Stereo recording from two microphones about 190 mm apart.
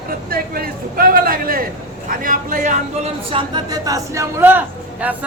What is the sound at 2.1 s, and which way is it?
Speech, 45° right (ahead or behind).